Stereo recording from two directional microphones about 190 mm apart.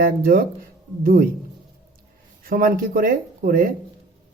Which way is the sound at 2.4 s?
50° right (ahead or behind).